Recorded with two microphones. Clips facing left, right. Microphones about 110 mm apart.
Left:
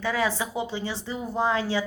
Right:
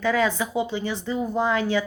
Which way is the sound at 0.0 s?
25° left (ahead or behind).